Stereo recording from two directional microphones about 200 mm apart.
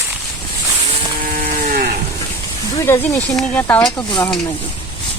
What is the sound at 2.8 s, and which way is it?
Speech, 15° left (ahead or behind).